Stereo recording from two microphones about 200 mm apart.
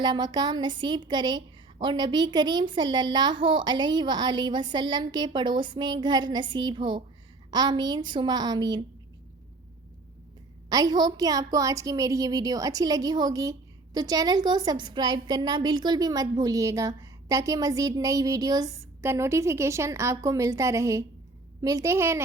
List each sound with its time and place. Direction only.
0.0 s a woman's voice: 20° right (ahead or behind)
10.7 s a woman's voice: 20° right (ahead or behind)